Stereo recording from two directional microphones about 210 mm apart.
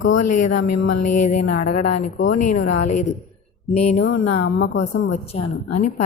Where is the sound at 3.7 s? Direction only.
30° left (ahead or behind).